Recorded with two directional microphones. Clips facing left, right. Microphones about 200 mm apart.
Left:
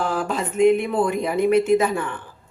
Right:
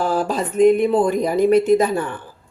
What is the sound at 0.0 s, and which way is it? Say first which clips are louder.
A woman's voice: right 4 dB; 35° right (ahead or behind).